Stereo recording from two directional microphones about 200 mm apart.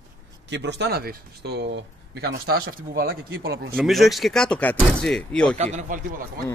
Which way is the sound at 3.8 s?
Centre (ahead or behind).